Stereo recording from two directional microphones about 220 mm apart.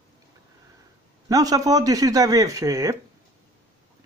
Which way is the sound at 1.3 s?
15° right (ahead or behind).